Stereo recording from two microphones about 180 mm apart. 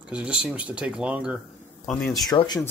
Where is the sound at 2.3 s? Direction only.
20° left (ahead or behind).